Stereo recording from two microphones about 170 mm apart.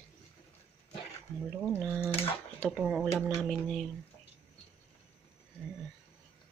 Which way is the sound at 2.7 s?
5° right (ahead or behind).